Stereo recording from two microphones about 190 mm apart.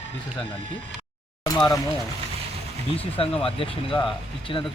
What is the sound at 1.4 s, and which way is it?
Speech, 20° left (ahead or behind).